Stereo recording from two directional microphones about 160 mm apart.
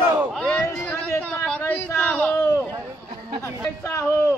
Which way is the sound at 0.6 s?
15° left (ahead or behind).